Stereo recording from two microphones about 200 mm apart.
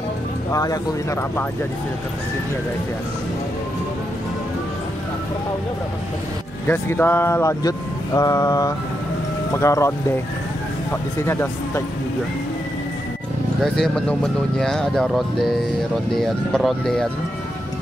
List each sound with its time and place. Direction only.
0.5 s speech: 15° left (ahead or behind)
6.7 s speech: 10° left (ahead or behind)
13.7 s speech: 5° left (ahead or behind)